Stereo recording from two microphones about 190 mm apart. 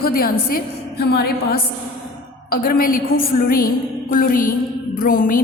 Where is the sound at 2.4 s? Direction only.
50° left (ahead or behind).